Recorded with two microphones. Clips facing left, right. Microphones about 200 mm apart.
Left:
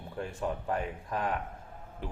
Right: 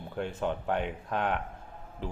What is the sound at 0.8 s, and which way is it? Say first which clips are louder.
Speech: right 2 dB; 85° right.